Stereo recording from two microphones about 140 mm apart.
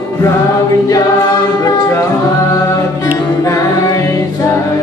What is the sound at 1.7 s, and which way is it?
Music, 20° left (ahead or behind).